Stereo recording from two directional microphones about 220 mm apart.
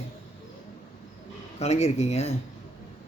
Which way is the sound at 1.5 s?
30° left (ahead or behind).